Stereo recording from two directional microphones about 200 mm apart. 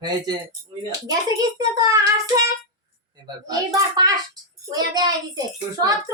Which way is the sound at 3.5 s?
20° right (ahead or behind).